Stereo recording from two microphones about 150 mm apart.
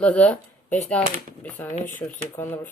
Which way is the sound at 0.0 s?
10° left (ahead or behind).